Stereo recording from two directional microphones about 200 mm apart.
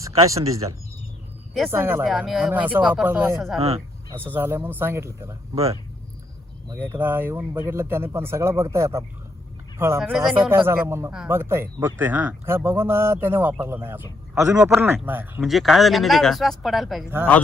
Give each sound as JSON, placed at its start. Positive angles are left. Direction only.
{"t": 0.3, "sound": "speech", "side_deg": -15}
{"t": 1.7, "sound": "speech", "side_deg": -10}
{"t": 6.7, "sound": "speech", "side_deg": -10}
{"t": 10.0, "sound": "speech", "side_deg": 0}